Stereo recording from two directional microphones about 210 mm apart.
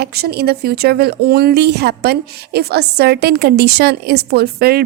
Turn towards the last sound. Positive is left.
turn(degrees=-50)  # may be behind; listen again after turning